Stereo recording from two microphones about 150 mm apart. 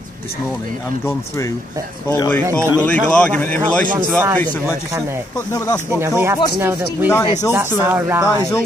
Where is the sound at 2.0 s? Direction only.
25° left (ahead or behind).